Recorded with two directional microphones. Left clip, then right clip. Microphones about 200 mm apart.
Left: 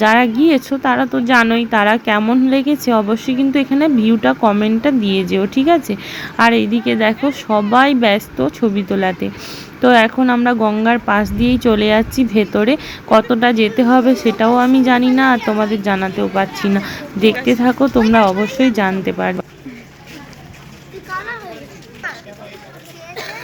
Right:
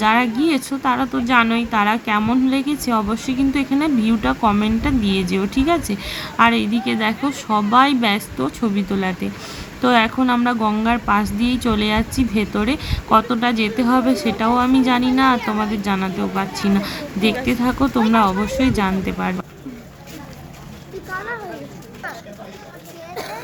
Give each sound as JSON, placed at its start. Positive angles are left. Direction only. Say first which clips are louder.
{"t": 0.0, "sound": "speech", "louder": "left 5 dB", "side_deg": 15}